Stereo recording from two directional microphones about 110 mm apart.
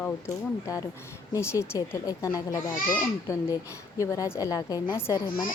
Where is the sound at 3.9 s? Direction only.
30° left (ahead or behind).